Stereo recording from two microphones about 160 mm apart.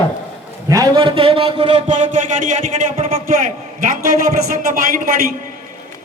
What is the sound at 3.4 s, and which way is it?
A man's voice, 55° right (ahead or behind).